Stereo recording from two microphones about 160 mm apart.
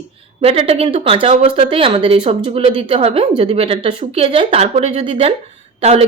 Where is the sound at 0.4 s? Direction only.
40° right (ahead or behind).